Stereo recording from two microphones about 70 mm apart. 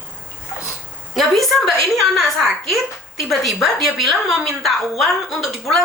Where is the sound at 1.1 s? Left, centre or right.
Centre.